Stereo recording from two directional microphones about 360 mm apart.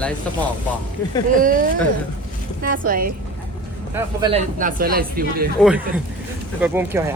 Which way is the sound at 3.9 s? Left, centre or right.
Centre.